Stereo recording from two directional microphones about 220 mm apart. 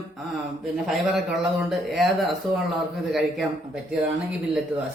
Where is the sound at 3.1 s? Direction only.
Centre (ahead or behind).